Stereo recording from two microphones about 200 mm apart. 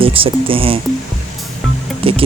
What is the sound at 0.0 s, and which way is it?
Speech, 25° right (ahead or behind).